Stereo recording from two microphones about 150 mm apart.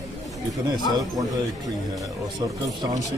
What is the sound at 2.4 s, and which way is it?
Speech, 25° right (ahead or behind).